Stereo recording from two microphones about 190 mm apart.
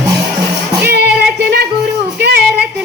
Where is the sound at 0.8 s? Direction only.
55° right (ahead or behind).